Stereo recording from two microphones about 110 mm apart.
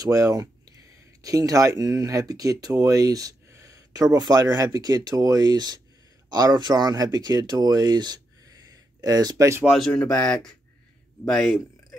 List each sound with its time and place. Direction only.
0.0 s speech: 30° right (ahead or behind)
9.7 s speech: centre (ahead or behind)